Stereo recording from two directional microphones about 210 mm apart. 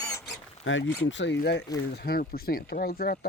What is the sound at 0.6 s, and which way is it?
Speech, 65° left (ahead or behind).